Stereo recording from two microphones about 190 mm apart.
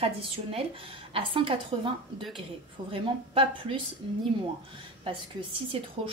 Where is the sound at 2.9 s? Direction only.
30° right (ahead or behind).